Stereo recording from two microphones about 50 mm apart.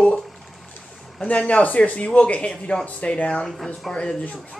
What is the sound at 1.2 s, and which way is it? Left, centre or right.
Speech, left.